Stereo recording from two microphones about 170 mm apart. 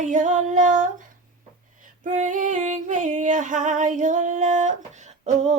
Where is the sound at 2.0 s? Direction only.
45° right (ahead or behind).